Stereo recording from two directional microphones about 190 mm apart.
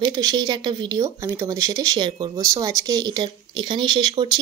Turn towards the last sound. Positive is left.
turn(degrees=-25)  # may be behind; listen again after turning